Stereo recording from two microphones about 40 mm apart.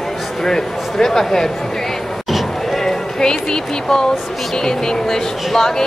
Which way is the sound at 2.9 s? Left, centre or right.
Centre.